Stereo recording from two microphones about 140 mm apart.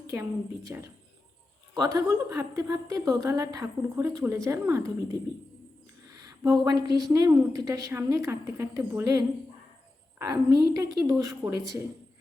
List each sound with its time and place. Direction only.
0.1 s a woman's voice: 20° right (ahead or behind)
6.1 s a woman's voice: 25° right (ahead or behind)